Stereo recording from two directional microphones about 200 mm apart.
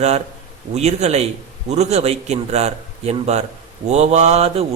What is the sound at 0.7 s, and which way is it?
Mantra, 35° right (ahead or behind).